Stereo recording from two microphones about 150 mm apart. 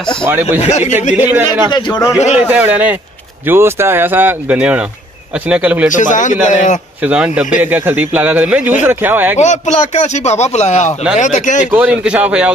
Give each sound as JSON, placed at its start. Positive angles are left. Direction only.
{"t": 0.2, "sound": "speech", "side_deg": -15}
{"t": 0.6, "sound": "a man's voice", "side_deg": 50}
{"t": 1.1, "sound": "speech", "side_deg": -15}
{"t": 1.7, "sound": "a man's voice", "side_deg": 30}
{"t": 2.1, "sound": "a man's voice", "side_deg": 45}
{"t": 2.4, "sound": "speech", "side_deg": -10}
{"t": 5.9, "sound": "a man's voice", "side_deg": 60}
{"t": 7.0, "sound": "speech", "side_deg": -10}
{"t": 9.4, "sound": "a man's voice", "side_deg": 50}
{"t": 11.7, "sound": "speech", "side_deg": -10}